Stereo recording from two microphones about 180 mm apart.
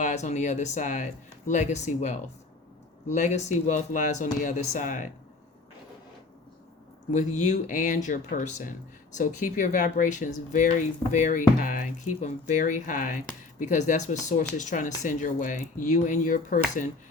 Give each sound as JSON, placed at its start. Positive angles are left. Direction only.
{"t": 0.0, "sound": "speech", "side_deg": 40}
{"t": 7.1, "sound": "speech", "side_deg": 40}